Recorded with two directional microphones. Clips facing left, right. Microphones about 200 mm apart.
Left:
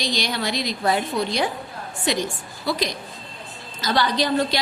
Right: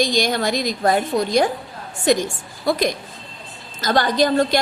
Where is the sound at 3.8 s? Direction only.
45° right (ahead or behind).